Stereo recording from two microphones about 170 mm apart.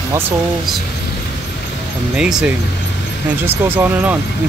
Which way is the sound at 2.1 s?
5° right (ahead or behind).